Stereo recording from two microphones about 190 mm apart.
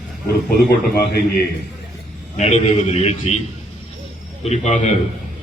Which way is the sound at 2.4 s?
35° left (ahead or behind).